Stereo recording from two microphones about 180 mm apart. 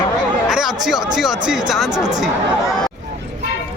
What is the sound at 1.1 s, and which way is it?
Speech, centre (ahead or behind).